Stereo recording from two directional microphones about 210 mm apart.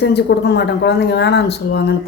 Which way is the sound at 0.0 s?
55° left (ahead or behind).